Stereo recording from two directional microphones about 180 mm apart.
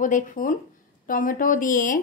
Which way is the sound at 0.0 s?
45° left (ahead or behind).